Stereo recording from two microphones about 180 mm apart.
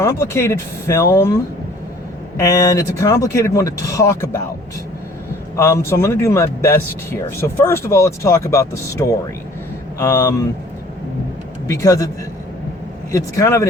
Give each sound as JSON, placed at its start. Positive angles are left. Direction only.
{"t": 0.0, "sound": "speech", "side_deg": 15}
{"t": 2.4, "sound": "speech", "side_deg": 20}
{"t": 5.5, "sound": "speech", "side_deg": 15}
{"t": 11.7, "sound": "speech", "side_deg": 20}